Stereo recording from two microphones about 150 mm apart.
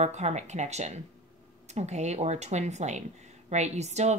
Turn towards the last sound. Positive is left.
turn(degrees=-50)  # may be behind; listen again after turning